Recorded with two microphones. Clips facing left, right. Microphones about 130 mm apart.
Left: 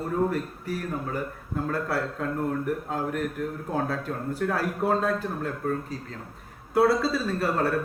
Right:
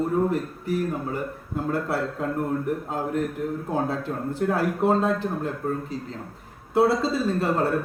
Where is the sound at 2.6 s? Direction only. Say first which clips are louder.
Right 1 dB; 25° right (ahead or behind).